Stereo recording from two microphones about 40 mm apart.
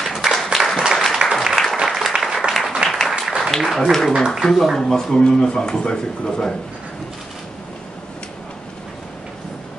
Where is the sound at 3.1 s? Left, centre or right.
Right.